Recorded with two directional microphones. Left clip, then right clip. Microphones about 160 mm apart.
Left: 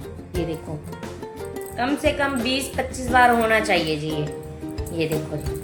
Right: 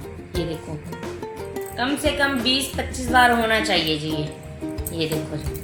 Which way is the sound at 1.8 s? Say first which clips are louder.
Even; 15° left (ahead or behind).